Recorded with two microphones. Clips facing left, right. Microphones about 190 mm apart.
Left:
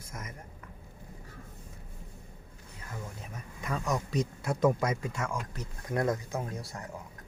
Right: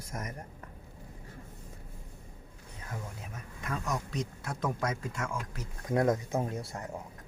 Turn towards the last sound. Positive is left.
turn(degrees=-25)  # may be behind; listen again after turning